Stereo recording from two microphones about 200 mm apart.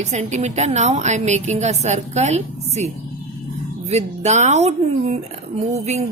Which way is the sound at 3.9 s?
35° right (ahead or behind).